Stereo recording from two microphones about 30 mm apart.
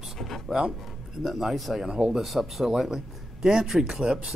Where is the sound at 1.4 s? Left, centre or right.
Centre.